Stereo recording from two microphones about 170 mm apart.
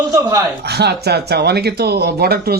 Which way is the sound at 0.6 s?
75° right (ahead or behind).